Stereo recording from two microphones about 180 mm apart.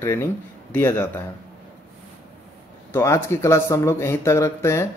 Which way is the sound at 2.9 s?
15° left (ahead or behind).